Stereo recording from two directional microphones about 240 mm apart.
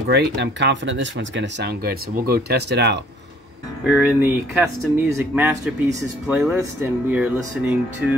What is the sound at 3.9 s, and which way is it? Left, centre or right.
Speech, centre.